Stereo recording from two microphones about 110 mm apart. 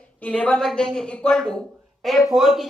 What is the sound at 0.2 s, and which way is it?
A man's voice, 10° left (ahead or behind).